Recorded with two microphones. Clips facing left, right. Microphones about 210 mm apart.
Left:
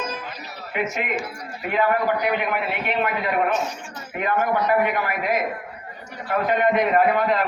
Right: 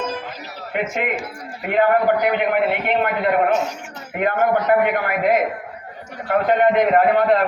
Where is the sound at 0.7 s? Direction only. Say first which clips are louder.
Right 2 dB; 55° right (ahead or behind).